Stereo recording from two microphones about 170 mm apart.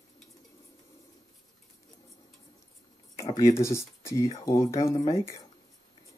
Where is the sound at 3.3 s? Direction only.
20° left (ahead or behind).